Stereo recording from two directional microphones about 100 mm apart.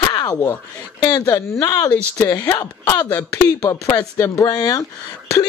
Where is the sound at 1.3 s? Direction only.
25° left (ahead or behind).